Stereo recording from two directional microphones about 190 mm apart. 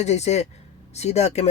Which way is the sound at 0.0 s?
35° left (ahead or behind).